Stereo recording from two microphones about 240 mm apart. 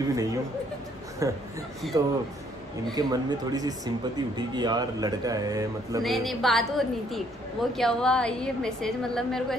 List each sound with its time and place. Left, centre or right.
0.1 s speech: centre
6.0 s a woman's voice: centre